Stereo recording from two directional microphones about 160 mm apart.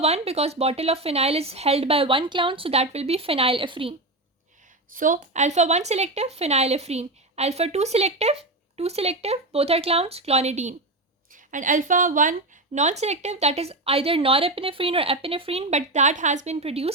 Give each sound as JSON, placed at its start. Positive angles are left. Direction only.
{"t": 0.0, "sound": "a woman's voice", "side_deg": -40}
{"t": 4.9, "sound": "a woman's voice", "side_deg": -55}